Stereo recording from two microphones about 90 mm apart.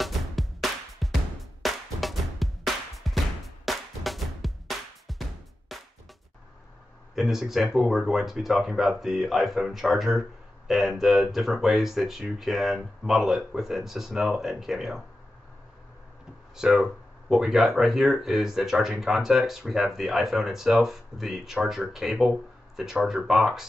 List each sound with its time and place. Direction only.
0.0 s music: centre (ahead or behind)
7.2 s speech: 5° right (ahead or behind)
16.5 s speech: 5° right (ahead or behind)